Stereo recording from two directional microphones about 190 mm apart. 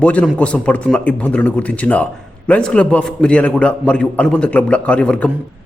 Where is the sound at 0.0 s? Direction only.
5° left (ahead or behind).